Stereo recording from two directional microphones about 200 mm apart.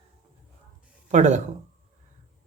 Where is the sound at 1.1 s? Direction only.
35° right (ahead or behind).